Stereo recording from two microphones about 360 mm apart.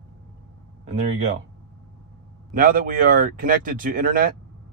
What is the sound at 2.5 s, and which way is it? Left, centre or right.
Speech, right.